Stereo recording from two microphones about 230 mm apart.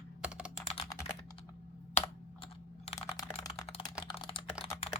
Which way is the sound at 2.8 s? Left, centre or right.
Left.